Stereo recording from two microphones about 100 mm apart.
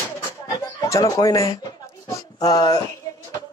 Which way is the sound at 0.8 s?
35° left (ahead or behind).